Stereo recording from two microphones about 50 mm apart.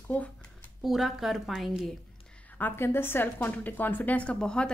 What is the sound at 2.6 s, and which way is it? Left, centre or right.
A woman's voice, left.